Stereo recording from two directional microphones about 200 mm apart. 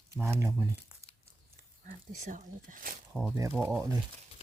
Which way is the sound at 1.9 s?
40° right (ahead or behind).